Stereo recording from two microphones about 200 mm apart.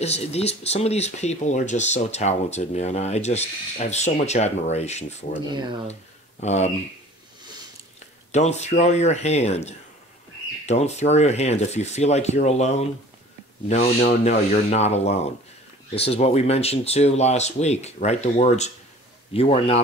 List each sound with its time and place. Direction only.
0.0 s speech: 30° left (ahead or behind)
5.5 s speech: 20° right (ahead or behind)
6.4 s speech: 35° left (ahead or behind)
8.3 s a man's voice: 35° left (ahead or behind)